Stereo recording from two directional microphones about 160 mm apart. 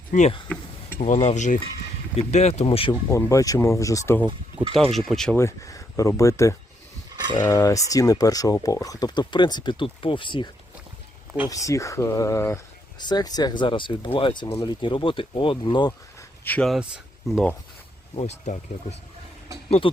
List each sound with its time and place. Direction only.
0.1 s speech: 45° left (ahead or behind)
0.4 s a sound: 10° left (ahead or behind)
0.9 s speech: 45° left (ahead or behind)
2.9 s speech: 15° left (ahead or behind)
4.9 s speech: centre (ahead or behind)
5.4 s speech: 20° left (ahead or behind)
16.4 s speech: 10° left (ahead or behind)
16.6 s speech: 5° right (ahead or behind)
18.1 s speech: 40° left (ahead or behind)
19.8 s speech: 35° left (ahead or behind)